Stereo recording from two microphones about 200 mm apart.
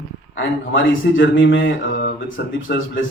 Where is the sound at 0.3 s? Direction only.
70° left (ahead or behind).